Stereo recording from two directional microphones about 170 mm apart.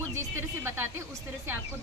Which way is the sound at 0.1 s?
15° right (ahead or behind).